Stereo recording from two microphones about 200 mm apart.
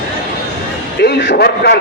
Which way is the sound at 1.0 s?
50° left (ahead or behind).